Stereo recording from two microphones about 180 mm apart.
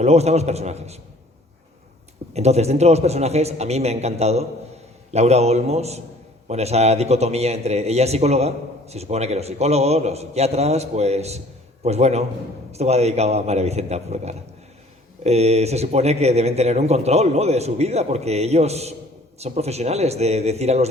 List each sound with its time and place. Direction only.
0.0 s a man's voice: 35° right (ahead or behind)
2.3 s a man's voice: 35° right (ahead or behind)